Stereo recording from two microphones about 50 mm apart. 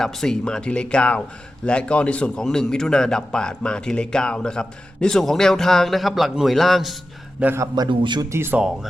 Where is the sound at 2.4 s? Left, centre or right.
Centre.